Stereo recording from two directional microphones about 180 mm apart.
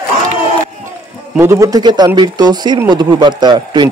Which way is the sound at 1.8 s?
25° right (ahead or behind).